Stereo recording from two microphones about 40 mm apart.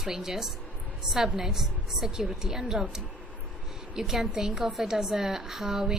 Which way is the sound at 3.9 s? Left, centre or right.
Centre.